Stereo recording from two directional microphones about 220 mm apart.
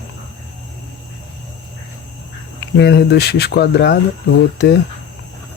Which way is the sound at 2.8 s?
50° left (ahead or behind).